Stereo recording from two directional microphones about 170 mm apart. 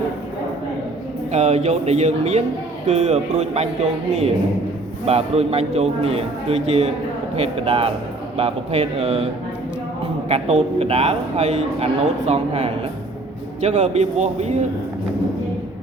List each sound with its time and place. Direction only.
1.3 s a man's voice: 40° right (ahead or behind)